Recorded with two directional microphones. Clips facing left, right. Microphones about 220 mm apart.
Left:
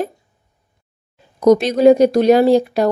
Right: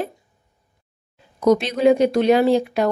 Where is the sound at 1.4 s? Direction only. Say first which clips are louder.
Left 5 dB; 40° left (ahead or behind).